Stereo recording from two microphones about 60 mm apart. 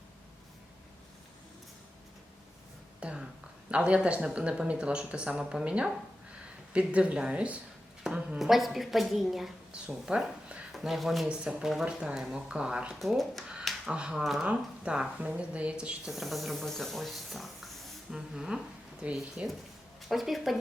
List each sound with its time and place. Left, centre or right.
3.0 s speech: centre
8.0 s a sound: centre
8.4 s speech: centre
9.7 s speech: centre
11.3 s speech: centre
12.9 s speech: centre
13.9 s speech: centre
14.4 s speech: centre
16.1 s speech: centre
19.0 s speech: centre
20.0 s speech: centre